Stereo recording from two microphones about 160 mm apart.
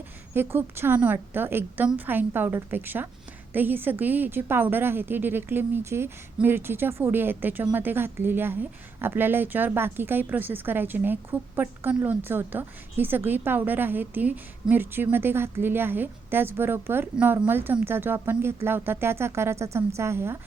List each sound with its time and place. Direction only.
0.3 s a woman's voice: 15° right (ahead or behind)